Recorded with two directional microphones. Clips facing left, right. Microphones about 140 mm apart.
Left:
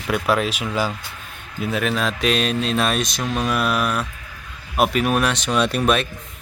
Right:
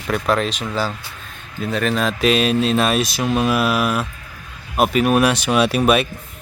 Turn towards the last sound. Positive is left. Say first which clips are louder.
# right 3 dB
turn(degrees=-5)  # may be behind; listen again after turning